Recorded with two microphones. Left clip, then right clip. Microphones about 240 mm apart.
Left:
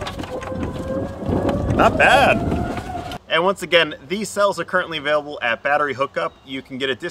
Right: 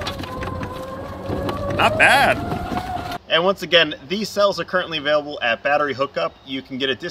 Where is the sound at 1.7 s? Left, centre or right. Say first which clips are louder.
Left 1 dB; left.